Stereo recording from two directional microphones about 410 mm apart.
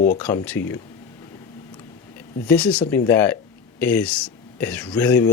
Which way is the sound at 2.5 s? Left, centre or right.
Centre.